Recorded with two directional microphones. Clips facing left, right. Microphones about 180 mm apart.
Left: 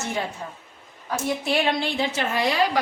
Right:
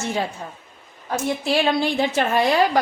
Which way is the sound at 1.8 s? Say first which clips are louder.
Right 5 dB; 50° right (ahead or behind).